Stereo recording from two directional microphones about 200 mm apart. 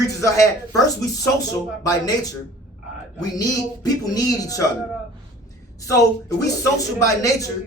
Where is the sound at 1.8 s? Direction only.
20° left (ahead or behind).